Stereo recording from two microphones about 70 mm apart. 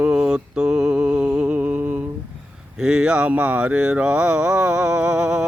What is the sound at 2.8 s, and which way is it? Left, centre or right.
Mantra, centre.